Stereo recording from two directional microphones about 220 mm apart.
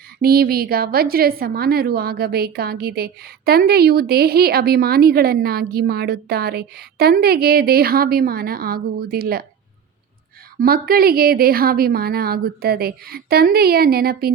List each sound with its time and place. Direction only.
0.2 s a woman's voice: 45° right (ahead or behind)
10.6 s a woman's voice: 45° right (ahead or behind)